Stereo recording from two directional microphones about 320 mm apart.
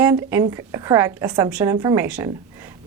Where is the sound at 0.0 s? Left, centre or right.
Centre.